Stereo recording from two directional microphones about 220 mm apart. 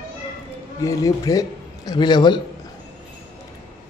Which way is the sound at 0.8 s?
15° left (ahead or behind).